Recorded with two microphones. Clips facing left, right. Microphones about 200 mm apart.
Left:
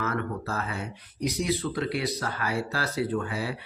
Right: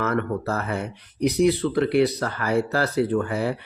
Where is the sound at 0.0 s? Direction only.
60° right (ahead or behind).